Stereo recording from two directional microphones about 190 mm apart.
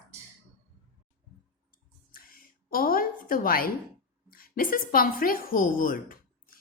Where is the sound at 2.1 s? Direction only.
50° left (ahead or behind).